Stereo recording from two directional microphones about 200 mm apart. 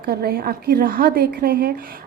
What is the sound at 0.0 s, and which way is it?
A woman's voice, 50° right (ahead or behind).